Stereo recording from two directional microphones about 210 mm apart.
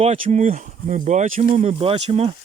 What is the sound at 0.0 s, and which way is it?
Speech, 30° right (ahead or behind).